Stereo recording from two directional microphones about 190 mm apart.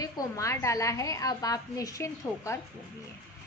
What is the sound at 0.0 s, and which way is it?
A woman's voice, 15° left (ahead or behind).